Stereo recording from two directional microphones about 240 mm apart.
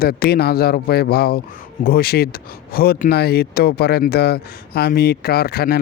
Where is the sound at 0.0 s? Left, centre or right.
Left.